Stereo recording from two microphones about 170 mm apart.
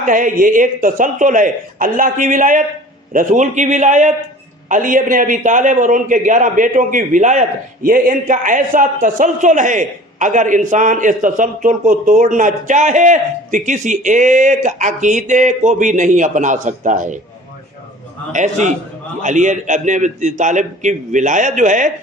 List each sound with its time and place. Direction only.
0.0 s a man's voice: 50° right (ahead or behind)
18.3 s a man's voice: 45° right (ahead or behind)